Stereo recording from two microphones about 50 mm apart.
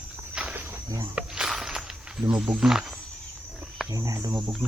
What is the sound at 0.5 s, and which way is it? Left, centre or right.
Walk, right.